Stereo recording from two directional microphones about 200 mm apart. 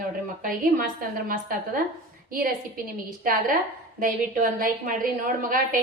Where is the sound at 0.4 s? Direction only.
45° right (ahead or behind).